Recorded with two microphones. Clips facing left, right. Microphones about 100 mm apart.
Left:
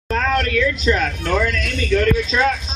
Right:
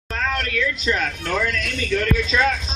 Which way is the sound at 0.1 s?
55° left (ahead or behind).